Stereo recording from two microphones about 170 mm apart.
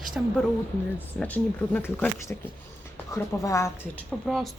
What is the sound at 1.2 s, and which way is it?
Speech, 10° left (ahead or behind).